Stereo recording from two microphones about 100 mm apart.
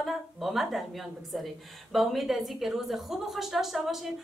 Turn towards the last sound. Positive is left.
turn(degrees=0)  # may be behind; listen again after turning